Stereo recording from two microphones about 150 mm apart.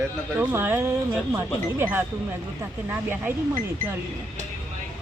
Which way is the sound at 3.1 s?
15° right (ahead or behind).